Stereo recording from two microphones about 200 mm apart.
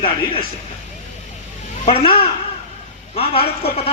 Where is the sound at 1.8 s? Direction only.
25° left (ahead or behind).